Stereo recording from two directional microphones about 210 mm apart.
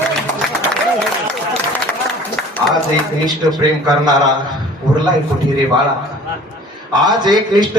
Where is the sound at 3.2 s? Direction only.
20° right (ahead or behind).